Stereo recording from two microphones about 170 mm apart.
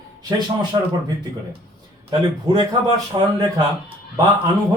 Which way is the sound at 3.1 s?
25° right (ahead or behind).